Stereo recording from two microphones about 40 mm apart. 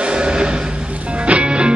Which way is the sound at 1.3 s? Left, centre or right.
Right.